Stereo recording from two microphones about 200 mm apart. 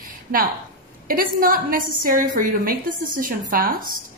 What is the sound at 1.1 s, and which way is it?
A woman's voice, 45° right (ahead or behind).